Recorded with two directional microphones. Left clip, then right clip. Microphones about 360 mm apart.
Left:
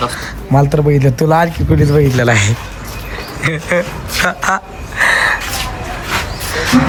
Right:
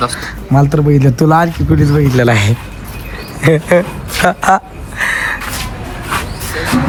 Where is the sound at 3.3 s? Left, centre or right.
Centre.